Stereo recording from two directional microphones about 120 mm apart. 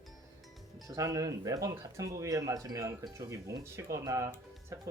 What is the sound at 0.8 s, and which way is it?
Speech, 30° right (ahead or behind).